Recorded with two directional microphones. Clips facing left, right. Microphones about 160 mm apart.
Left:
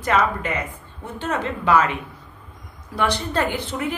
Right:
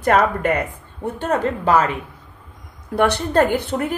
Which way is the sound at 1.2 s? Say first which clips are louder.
Right 3 dB; 40° right (ahead or behind).